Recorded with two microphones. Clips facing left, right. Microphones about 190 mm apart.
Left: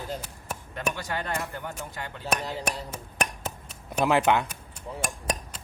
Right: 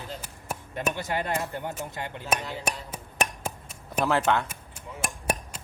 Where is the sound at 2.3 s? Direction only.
5° right (ahead or behind).